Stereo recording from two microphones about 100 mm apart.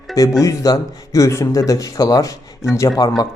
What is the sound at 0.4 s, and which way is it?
Speech, 35° left (ahead or behind).